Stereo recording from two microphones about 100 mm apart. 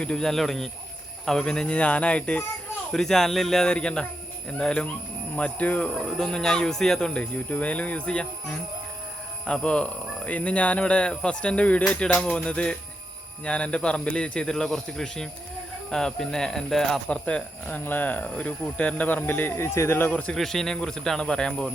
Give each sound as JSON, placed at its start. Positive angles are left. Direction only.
{"t": 0.0, "sound": "speech", "side_deg": 5}
{"t": 9.5, "sound": "speech", "side_deg": 10}
{"t": 20.2, "sound": "speech", "side_deg": 5}